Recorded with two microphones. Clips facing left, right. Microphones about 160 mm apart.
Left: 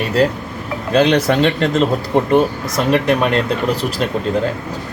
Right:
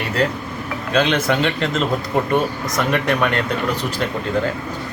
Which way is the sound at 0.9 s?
35° left (ahead or behind).